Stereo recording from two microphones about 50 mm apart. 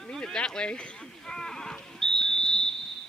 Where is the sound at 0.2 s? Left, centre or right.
Centre.